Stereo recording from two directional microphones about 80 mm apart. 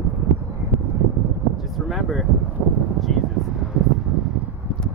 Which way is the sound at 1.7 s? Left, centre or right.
Centre.